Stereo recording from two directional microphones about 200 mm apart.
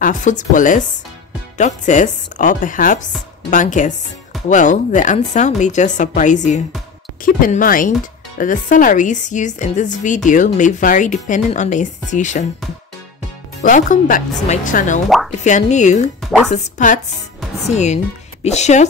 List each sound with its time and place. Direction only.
0.0 s a woman's voice: 40° left (ahead or behind)
13.6 s a woman's voice: 40° left (ahead or behind)
16.2 s music: centre (ahead or behind)
16.5 s a woman's voice: 40° left (ahead or behind)